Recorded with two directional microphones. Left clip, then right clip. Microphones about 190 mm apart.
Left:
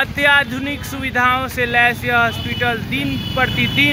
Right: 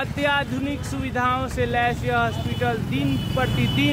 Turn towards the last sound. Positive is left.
turn(degrees=-5)  # may be behind; listen again after turning